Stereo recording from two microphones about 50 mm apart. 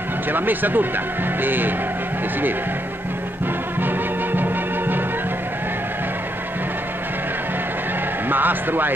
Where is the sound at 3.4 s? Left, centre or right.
Right.